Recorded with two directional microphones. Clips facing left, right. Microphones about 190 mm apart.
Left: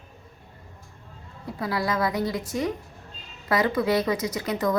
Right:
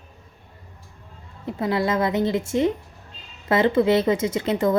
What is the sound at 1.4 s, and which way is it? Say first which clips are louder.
Speech: right 5 dB; 25° right (ahead or behind).